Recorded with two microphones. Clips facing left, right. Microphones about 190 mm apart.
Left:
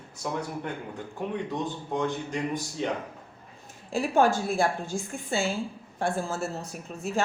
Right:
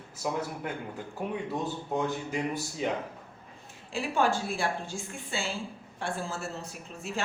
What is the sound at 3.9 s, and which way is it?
A woman's voice, 45° left (ahead or behind).